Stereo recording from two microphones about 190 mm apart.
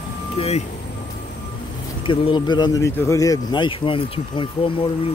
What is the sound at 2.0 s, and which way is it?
Speech, 25° left (ahead or behind).